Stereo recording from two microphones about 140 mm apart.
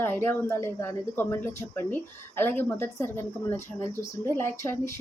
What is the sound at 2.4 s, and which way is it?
Speech, 15° left (ahead or behind).